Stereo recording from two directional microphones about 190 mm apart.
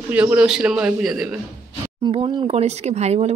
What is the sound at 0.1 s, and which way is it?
A man's voice, 5° right (ahead or behind).